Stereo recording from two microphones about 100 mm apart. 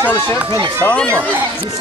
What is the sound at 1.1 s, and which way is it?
Speech, 25° right (ahead or behind).